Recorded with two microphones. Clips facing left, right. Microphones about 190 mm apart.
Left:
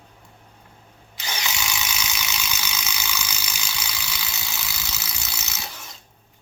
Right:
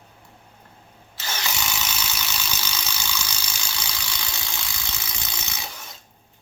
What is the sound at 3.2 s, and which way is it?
Ratchet, 10° left (ahead or behind).